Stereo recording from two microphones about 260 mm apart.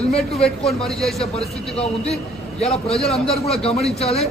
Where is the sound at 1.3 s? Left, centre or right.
Left.